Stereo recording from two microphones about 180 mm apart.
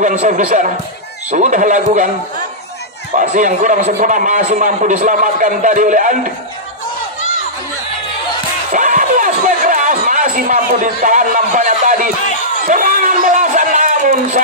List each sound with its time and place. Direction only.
0.0 s a man's voice: 45° right (ahead or behind)
3.2 s a man's voice: 45° right (ahead or behind)
8.7 s a sound: 45° right (ahead or behind)